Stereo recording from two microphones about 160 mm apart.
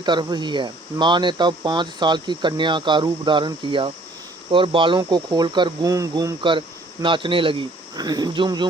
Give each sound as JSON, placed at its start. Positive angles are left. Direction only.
{"t": 0.0, "sound": "speech", "side_deg": -30}
{"t": 7.0, "sound": "speech", "side_deg": -30}